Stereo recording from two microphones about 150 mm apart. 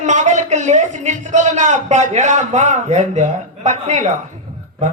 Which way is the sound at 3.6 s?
50° right (ahead or behind).